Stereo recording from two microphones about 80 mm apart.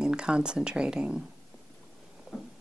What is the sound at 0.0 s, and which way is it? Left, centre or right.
Speech, centre.